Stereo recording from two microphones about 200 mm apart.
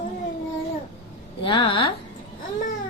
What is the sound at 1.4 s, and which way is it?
Mantra, 25° left (ahead or behind).